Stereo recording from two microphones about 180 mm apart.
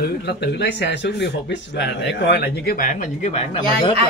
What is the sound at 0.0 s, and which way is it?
Speech, 65° left (ahead or behind).